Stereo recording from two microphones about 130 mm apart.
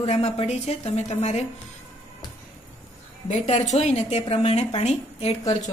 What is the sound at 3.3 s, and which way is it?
A woman's voice, 60° left (ahead or behind).